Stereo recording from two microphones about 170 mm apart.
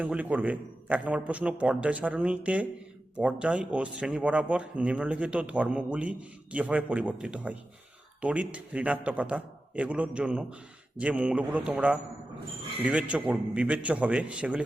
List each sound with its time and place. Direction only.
0.0 s speech: 10° right (ahead or behind)